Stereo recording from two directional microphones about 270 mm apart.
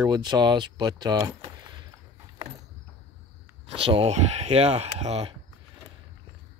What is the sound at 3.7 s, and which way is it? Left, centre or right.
Speech, right.